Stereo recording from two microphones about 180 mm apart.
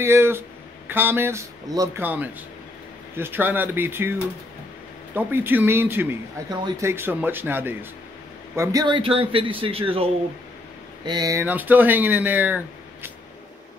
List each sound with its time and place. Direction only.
0.0 s speech: 15° right (ahead or behind)
5.1 s speech: 10° right (ahead or behind)
8.5 s speech: 20° right (ahead or behind)
11.1 s speech: 20° right (ahead or behind)